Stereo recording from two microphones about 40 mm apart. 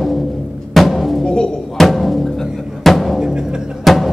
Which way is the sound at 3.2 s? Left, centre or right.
Centre.